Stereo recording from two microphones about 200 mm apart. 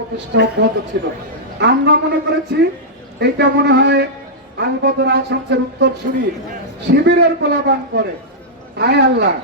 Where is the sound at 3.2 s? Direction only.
60° right (ahead or behind).